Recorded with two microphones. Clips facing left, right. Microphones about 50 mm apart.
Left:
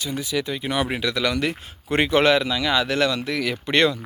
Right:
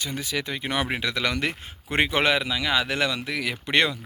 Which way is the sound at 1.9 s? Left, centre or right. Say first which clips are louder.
Left 4 dB; right.